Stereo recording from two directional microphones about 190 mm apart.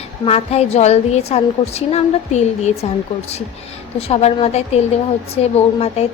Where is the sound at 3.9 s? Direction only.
30° left (ahead or behind).